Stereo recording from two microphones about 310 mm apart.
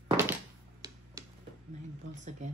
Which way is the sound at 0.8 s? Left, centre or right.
Centre.